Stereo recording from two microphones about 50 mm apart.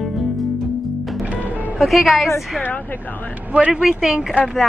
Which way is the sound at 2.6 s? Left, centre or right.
Left.